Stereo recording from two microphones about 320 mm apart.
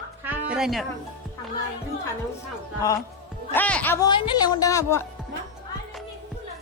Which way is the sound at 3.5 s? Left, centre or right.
Centre.